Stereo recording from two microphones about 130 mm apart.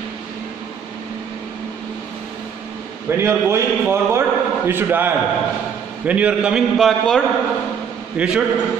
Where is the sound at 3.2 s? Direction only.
20° right (ahead or behind).